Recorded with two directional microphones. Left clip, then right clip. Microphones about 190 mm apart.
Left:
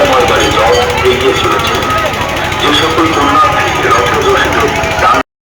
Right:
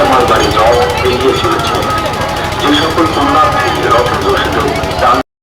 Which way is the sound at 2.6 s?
60° right (ahead or behind).